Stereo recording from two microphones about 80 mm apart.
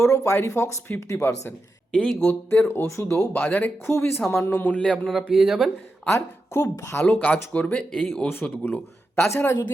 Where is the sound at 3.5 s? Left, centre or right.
Left.